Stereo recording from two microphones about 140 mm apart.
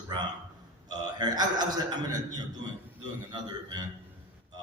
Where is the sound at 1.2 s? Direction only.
30° right (ahead or behind).